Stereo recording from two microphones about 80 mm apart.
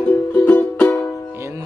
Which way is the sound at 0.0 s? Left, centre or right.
Centre.